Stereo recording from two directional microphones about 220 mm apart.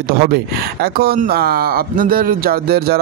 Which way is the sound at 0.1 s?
45° right (ahead or behind).